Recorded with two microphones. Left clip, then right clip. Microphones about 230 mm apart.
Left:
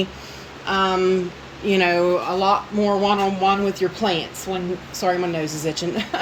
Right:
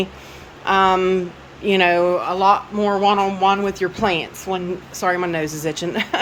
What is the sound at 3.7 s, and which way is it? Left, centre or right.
A woman's voice, centre.